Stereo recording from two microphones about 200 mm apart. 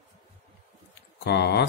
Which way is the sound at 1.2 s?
55° left (ahead or behind).